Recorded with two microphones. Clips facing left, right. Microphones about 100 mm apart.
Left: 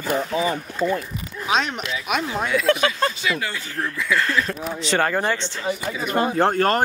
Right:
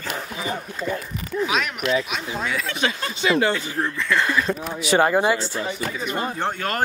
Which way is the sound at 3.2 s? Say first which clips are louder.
Right 6 dB; 30° right (ahead or behind).